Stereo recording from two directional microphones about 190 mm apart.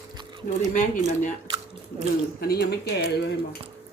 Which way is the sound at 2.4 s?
55° left (ahead or behind).